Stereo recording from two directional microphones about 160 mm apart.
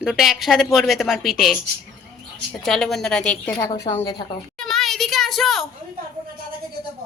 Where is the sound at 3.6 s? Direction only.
20° left (ahead or behind).